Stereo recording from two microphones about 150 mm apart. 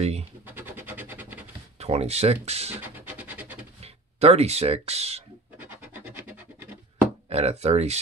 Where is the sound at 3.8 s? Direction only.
45° right (ahead or behind).